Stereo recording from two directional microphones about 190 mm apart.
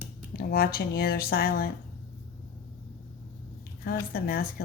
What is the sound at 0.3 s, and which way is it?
Speech, 50° left (ahead or behind).